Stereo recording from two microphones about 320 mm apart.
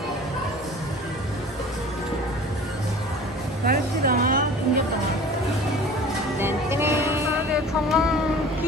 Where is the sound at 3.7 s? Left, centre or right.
Right.